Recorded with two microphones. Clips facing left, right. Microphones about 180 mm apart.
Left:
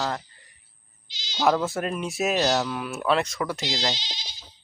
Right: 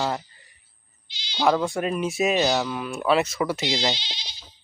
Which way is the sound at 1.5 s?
Centre (ahead or behind).